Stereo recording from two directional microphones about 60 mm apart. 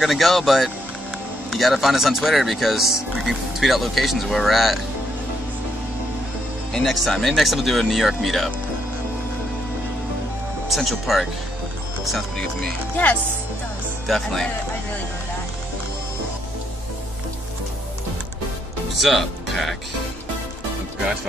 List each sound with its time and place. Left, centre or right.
0.0 s speech: centre
6.7 s speech: centre
10.7 s speech: centre
12.9 s speech: left
14.0 s speech: centre
18.9 s speech: centre